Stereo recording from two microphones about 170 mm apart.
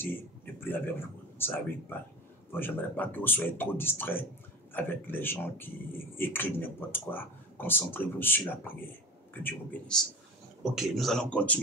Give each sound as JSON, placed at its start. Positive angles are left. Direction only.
{"t": 0.7, "sound": "speech", "side_deg": 10}
{"t": 10.6, "sound": "speech", "side_deg": 0}